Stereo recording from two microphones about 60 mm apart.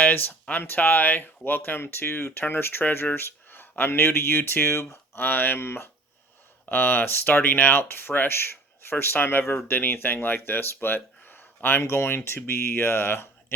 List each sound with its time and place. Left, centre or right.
0.0 s speech: left
11.8 s speech: left